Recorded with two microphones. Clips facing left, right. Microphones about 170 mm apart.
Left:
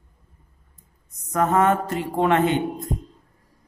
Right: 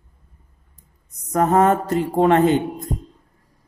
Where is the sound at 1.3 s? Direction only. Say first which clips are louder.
Right 3 dB; 35° right (ahead or behind).